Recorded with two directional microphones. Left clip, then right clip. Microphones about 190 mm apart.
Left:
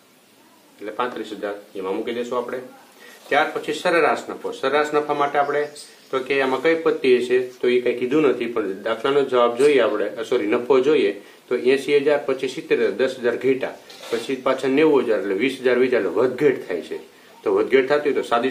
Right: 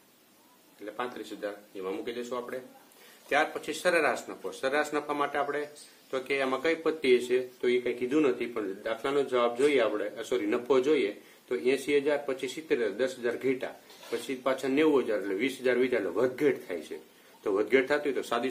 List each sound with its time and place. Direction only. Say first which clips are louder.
0.9 s speech: left 11 dB; 40° right (ahead or behind)